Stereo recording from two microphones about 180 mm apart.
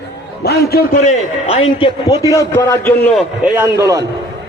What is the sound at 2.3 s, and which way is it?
Speech, 15° left (ahead or behind).